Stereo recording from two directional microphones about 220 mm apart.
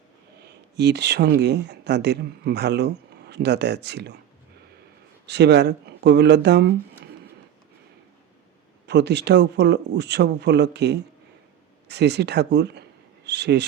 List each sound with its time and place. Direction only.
0.8 s speech: 50° right (ahead or behind)
5.2 s speech: 50° right (ahead or behind)
8.9 s speech: 50° right (ahead or behind)